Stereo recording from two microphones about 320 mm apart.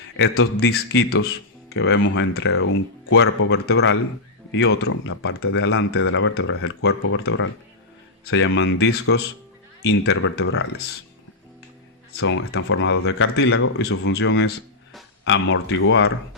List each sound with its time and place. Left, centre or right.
0.2 s speech: left
12.1 s speech: left